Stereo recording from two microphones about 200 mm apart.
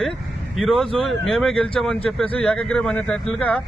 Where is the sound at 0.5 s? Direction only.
Centre (ahead or behind).